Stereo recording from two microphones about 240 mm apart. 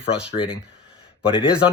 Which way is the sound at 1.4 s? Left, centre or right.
Left.